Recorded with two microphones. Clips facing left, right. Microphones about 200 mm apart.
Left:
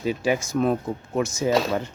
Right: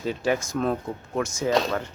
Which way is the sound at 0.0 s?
10° left (ahead or behind).